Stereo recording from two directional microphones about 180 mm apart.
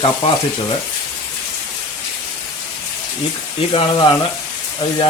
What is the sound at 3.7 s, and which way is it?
Speech, 30° left (ahead or behind).